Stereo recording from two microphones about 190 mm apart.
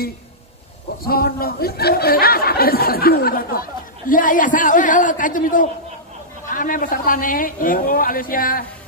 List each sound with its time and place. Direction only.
1.0 s speech: 50° left (ahead or behind)